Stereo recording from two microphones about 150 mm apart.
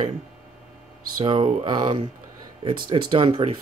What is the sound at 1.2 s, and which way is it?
Speech, 35° right (ahead or behind).